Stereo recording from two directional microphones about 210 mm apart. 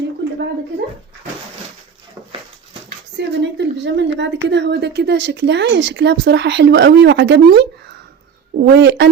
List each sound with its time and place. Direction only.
3.2 s a woman's voice: 55° right (ahead or behind)
8.7 s speech: 55° right (ahead or behind)